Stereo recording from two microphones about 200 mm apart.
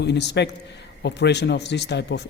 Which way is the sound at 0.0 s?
55° left (ahead or behind).